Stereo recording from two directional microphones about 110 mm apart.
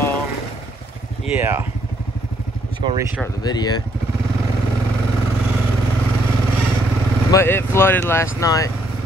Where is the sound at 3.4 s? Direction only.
40° left (ahead or behind).